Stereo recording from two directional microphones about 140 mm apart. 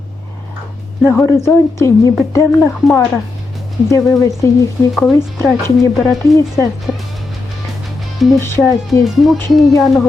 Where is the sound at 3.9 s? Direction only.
20° left (ahead or behind).